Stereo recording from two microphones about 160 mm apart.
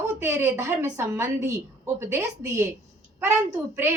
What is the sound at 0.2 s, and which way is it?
A woman's voice, 15° right (ahead or behind).